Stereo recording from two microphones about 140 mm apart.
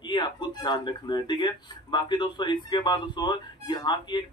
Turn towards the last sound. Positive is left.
turn(degrees=30)  # may be behind; listen again after turning